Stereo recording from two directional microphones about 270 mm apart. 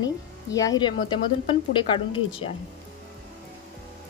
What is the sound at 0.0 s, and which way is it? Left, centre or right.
Speech, centre.